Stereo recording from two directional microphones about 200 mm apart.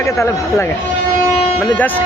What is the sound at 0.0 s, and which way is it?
Speech, 15° left (ahead or behind).